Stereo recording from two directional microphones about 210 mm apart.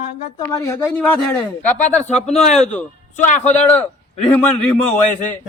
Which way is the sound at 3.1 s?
35° left (ahead or behind).